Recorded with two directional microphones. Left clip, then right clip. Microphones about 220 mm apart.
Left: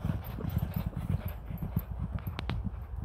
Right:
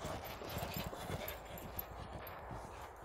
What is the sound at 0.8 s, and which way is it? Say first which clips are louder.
Clip-clop: left 2 dB; 5° left (ahead or behind).